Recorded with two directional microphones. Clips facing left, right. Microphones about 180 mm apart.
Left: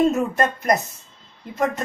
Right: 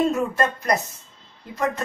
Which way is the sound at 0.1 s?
20° left (ahead or behind).